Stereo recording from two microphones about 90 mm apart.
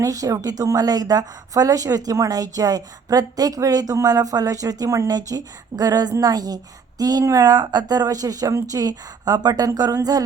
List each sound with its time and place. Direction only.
0.0 s a woman's voice: 40° right (ahead or behind)